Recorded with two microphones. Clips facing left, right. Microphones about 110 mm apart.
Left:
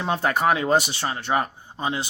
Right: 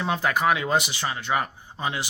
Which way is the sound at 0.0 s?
35° left (ahead or behind).